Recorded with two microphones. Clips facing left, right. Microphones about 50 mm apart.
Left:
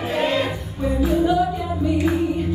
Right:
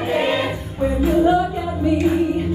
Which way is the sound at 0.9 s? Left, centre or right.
Right.